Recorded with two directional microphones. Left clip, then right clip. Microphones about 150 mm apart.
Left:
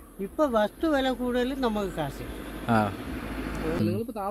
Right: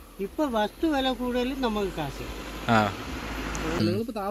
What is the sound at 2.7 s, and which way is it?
Speech, 5° left (ahead or behind).